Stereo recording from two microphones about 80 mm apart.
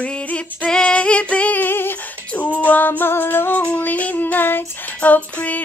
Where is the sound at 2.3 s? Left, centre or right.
Centre.